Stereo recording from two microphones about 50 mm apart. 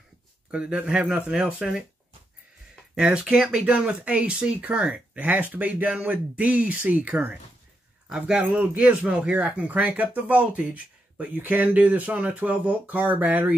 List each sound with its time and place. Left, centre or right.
0.5 s a man's voice: right
3.1 s speech: centre
8.1 s speech: centre
8.5 s speech: right